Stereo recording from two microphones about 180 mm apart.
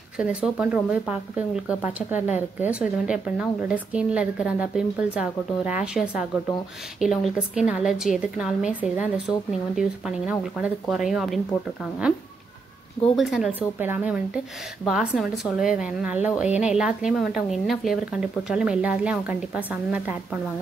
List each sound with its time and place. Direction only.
0.2 s speech: 5° right (ahead or behind)
2.1 s a woman's voice: 40° left (ahead or behind)
2.6 s speech: 5° right (ahead or behind)
13.1 s speech: centre (ahead or behind)